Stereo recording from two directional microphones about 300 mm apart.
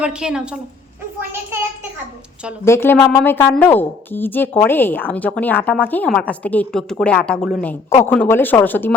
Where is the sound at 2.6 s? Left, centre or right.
Centre.